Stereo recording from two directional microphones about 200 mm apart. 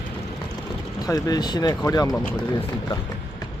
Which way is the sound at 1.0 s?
15° left (ahead or behind).